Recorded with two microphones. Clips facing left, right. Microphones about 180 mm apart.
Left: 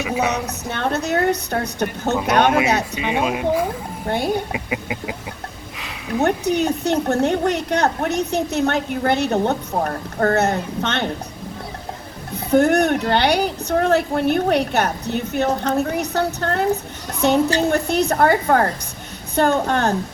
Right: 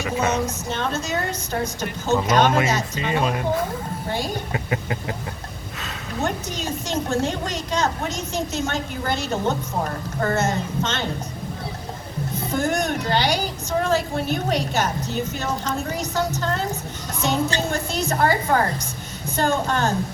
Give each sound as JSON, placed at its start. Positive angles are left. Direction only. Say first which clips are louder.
{"t": 0.2, "sound": "a woman's voice", "louder": "left 1 dB", "side_deg": 65}
{"t": 3.2, "sound": "a sound", "louder": "left 3 dB", "side_deg": 10}
{"t": 6.2, "sound": "a woman's voice", "louder": "left 9 dB", "side_deg": 65}
{"t": 12.5, "sound": "a woman's voice", "louder": "left 9 dB", "side_deg": 65}